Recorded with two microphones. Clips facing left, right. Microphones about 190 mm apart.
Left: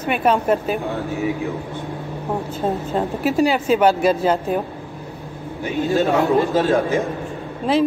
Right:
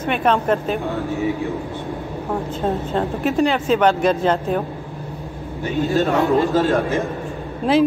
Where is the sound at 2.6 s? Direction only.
5° left (ahead or behind).